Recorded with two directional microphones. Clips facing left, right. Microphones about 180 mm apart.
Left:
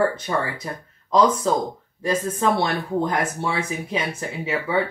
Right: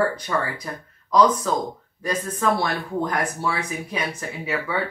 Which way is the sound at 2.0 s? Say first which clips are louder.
Left 2 dB; 20° left (ahead or behind).